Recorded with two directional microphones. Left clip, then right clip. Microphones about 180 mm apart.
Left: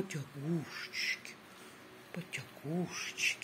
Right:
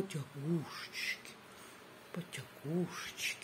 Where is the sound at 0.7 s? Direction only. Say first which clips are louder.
Left 3 dB; 20° right (ahead or behind).